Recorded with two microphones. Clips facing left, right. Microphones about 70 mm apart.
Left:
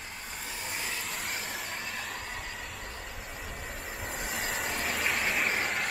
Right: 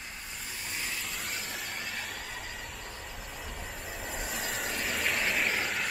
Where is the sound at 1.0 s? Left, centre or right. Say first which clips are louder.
Left 2 dB; left.